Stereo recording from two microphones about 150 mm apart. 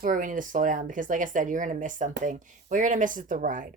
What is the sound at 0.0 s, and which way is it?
Speech, 60° right (ahead or behind).